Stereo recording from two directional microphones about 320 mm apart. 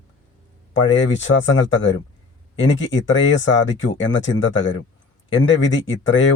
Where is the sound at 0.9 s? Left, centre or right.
Left.